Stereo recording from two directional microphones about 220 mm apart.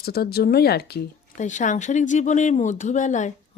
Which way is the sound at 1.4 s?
35° left (ahead or behind).